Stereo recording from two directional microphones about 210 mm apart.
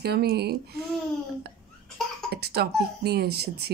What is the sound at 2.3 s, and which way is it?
Speech, 50° right (ahead or behind).